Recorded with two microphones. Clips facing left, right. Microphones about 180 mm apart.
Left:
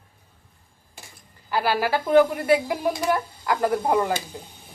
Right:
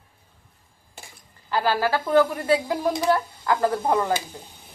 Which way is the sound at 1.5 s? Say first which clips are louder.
Even; 10° left (ahead or behind).